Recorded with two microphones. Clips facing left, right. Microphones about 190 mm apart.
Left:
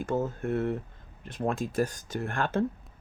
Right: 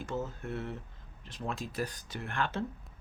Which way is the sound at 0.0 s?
55° left (ahead or behind).